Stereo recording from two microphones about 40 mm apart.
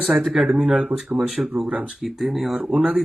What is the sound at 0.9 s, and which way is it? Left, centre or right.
Speech, right.